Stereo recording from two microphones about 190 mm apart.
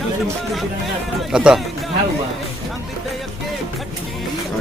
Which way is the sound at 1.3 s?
5° right (ahead or behind).